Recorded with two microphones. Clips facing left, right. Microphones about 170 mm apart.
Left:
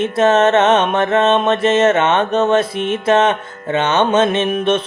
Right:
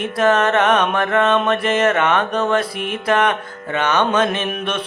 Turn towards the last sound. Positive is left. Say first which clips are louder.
# left 7 dB
turn(degrees=20)  # may be behind; listen again after turning